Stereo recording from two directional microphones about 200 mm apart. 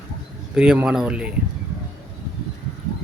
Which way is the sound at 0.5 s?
5° right (ahead or behind).